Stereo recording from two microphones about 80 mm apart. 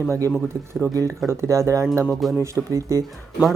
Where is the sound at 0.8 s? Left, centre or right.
Right.